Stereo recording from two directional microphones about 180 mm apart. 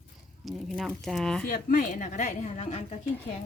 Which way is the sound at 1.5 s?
50° left (ahead or behind).